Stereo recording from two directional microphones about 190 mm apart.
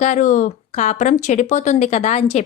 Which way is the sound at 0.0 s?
40° left (ahead or behind).